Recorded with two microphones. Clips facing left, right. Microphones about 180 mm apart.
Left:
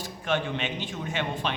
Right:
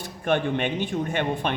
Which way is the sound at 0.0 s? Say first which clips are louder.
Right 4 dB; 55° right (ahead or behind).